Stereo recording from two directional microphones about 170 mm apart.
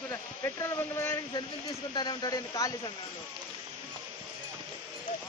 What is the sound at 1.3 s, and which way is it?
Speech, 25° left (ahead or behind).